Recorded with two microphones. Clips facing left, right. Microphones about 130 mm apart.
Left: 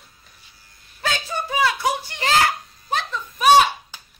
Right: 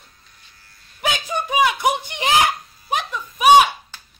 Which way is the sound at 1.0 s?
15° right (ahead or behind).